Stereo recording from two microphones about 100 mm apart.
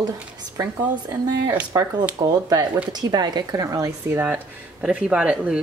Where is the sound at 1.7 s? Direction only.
40° right (ahead or behind).